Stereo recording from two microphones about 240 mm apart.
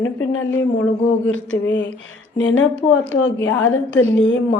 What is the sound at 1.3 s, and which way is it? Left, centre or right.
A woman's voice, left.